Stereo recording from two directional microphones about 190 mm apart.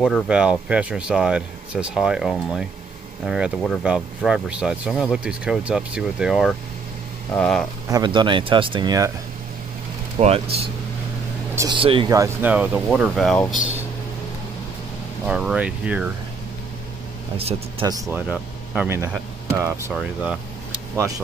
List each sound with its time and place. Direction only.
0.0 s speech: 5° right (ahead or behind)
7.9 s speech: 25° right (ahead or behind)
10.1 s speech: 30° right (ahead or behind)
12.1 s speech: 15° right (ahead or behind); by 13.6 s centre (ahead or behind)
15.2 s speech: 5° right (ahead or behind)
17.8 s speech: 15° right (ahead or behind)